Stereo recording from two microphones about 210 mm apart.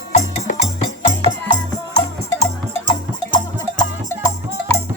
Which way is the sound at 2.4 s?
25° left (ahead or behind).